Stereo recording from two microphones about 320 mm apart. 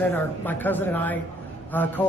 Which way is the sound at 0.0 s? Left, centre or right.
Centre.